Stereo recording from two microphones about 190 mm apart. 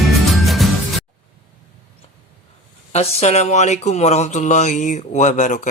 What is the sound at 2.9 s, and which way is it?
Speech, 35° left (ahead or behind).